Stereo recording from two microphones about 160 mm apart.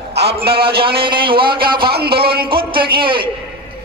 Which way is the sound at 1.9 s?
80° right.